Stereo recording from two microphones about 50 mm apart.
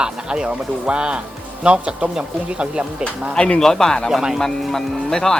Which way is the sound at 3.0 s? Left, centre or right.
Centre.